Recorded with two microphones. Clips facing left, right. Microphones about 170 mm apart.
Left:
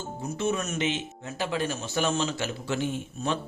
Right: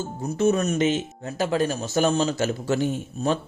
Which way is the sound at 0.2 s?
40° right (ahead or behind).